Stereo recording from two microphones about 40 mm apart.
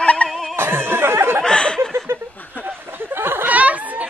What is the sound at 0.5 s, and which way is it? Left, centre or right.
Snicker, right.